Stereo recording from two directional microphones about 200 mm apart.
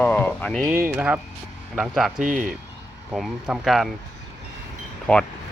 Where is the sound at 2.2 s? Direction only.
40° right (ahead or behind).